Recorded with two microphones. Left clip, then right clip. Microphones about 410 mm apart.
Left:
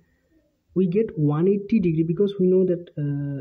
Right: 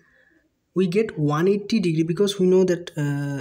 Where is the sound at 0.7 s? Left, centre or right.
Left.